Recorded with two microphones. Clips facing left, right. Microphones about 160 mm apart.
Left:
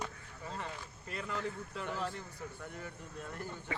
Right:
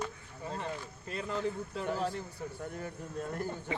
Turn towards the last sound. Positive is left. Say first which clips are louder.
# right 7 dB
turn(degrees=-40)  # may be behind; listen again after turning